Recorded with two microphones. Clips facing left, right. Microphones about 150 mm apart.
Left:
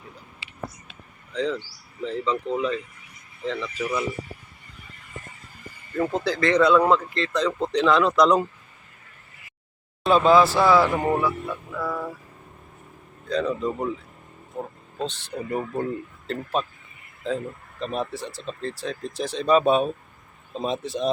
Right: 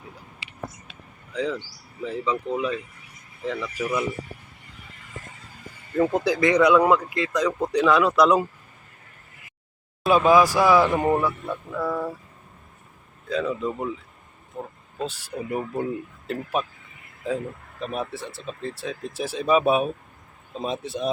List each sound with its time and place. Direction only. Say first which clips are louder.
1.3 s speech: left 1 dB; 10° right (ahead or behind)
6.0 s speech: right 3 dB; 15° right (ahead or behind)
10.0 s speech: even; 10° right (ahead or behind)
13.2 s speech: left 1 dB; 5° right (ahead or behind)